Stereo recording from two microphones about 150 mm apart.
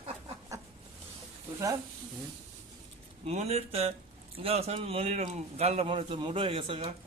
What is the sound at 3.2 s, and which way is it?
A man's voice, 45° right (ahead or behind).